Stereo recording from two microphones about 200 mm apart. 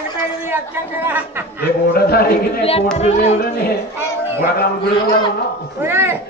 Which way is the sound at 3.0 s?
35° left (ahead or behind).